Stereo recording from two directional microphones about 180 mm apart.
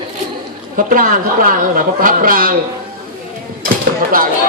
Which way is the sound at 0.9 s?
50° right (ahead or behind).